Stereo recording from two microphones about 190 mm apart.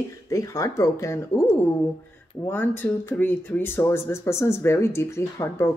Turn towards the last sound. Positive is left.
turn(degrees=15)  # may be behind; listen again after turning